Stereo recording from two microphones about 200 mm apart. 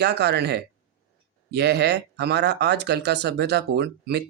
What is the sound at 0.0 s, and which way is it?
Speech, 60° right (ahead or behind).